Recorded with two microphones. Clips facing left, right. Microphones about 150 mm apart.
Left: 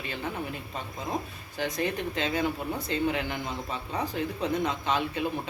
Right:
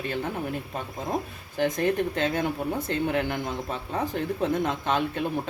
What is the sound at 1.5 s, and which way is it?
Speech, 50° right (ahead or behind).